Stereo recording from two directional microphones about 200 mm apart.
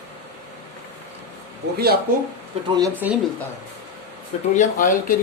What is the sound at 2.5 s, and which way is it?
Speech, 30° right (ahead or behind).